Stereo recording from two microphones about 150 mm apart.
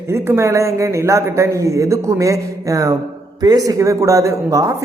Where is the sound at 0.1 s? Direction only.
15° right (ahead or behind).